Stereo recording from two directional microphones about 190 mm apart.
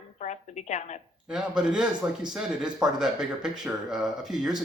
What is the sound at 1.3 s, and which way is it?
Speech, 5° right (ahead or behind).